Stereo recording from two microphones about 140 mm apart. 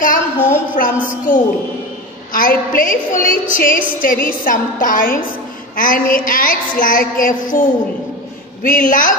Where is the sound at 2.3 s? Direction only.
80° left.